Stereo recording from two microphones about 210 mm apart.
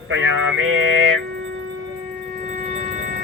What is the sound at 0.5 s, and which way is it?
Mantra, 70° right (ahead or behind).